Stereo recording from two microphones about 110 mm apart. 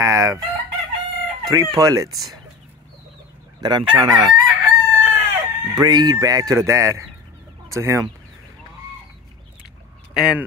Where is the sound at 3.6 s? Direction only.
40° right (ahead or behind).